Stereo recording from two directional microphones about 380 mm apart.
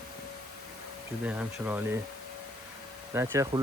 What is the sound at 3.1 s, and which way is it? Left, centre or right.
Speech, centre.